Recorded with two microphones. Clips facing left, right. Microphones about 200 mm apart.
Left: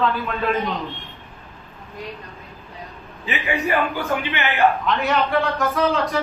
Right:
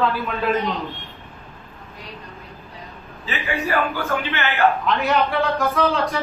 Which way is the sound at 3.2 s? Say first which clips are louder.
Left 2 dB; 15° left (ahead or behind).